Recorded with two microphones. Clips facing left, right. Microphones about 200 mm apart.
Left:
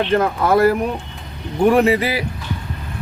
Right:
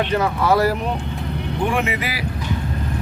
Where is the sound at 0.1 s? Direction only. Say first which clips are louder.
Left 4 dB; 50° left (ahead or behind).